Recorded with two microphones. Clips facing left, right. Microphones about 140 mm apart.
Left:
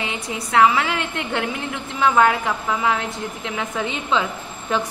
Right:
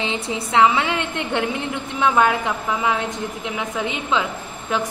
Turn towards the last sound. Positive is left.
turn(degrees=-10)  # may be behind; listen again after turning